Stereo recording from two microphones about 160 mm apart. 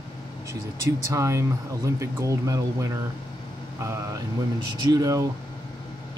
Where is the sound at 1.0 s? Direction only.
20° right (ahead or behind).